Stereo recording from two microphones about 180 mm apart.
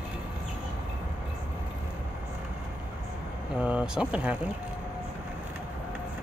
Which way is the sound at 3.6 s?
5° right (ahead or behind).